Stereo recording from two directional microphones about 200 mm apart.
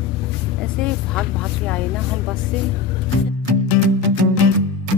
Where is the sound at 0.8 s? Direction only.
5° left (ahead or behind).